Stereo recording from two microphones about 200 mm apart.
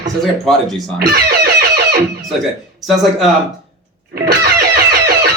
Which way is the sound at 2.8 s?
Centre (ahead or behind).